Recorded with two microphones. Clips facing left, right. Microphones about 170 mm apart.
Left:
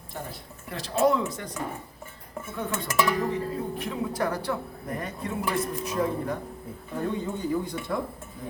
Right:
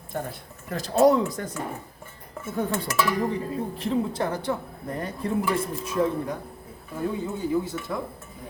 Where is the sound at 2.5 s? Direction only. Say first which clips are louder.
Right 5 dB; 40° right (ahead or behind).